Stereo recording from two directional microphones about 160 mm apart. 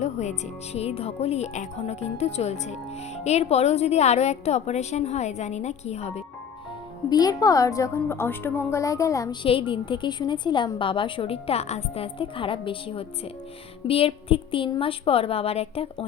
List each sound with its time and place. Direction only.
0.0 s a woman's voice: 45° left (ahead or behind)
7.1 s a woman's voice: 25° left (ahead or behind)
9.4 s a woman's voice: 35° left (ahead or behind)